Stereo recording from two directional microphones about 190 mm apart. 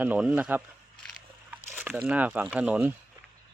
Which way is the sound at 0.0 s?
5° right (ahead or behind).